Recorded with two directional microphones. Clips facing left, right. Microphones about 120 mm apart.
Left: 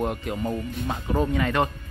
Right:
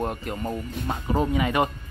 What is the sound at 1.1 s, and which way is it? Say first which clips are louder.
Speech: right 1 dB; 10° right (ahead or behind).